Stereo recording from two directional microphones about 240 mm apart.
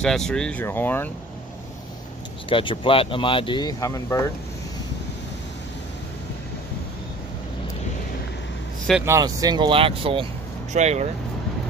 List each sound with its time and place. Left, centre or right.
0.0 s speech: centre
2.5 s speech: left
8.8 s speech: centre; by 11.1 s right